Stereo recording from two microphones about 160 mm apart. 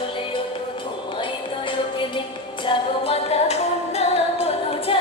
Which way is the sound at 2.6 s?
40° left (ahead or behind).